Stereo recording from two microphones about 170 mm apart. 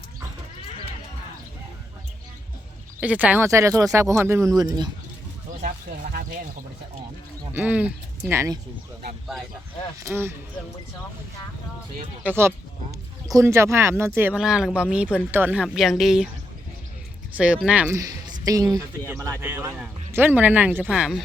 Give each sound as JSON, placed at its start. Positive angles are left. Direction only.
{"t": 3.0, "sound": "speech", "side_deg": -10}
{"t": 5.6, "sound": "speech", "side_deg": -55}
{"t": 7.5, "sound": "speech", "side_deg": -10}
{"t": 10.0, "sound": "speech", "side_deg": -15}
{"t": 12.2, "sound": "speech", "side_deg": -15}
{"t": 17.3, "sound": "speech", "side_deg": -5}